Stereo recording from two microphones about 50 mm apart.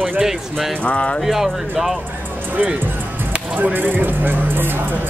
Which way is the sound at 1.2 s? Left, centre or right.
Centre.